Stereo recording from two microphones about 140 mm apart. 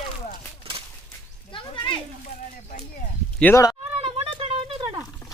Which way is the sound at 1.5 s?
35° left (ahead or behind).